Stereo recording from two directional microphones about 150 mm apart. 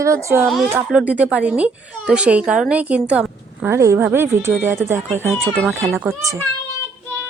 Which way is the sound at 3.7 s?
20° right (ahead or behind).